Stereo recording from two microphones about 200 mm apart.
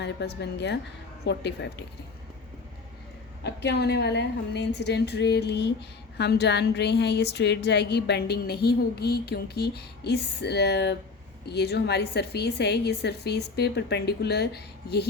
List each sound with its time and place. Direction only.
0.0 s a woman's voice: 55° left (ahead or behind)
3.4 s a woman's voice: 55° left (ahead or behind)